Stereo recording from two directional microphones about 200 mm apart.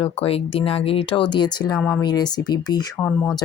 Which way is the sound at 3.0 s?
10° left (ahead or behind).